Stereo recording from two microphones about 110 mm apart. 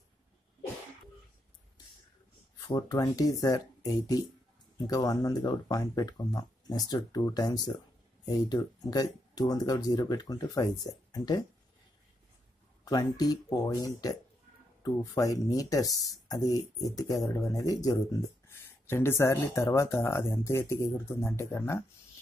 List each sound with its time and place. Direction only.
2.6 s speech: 35° left (ahead or behind)
12.8 s speech: 35° left (ahead or behind)
18.5 s speech: 20° left (ahead or behind)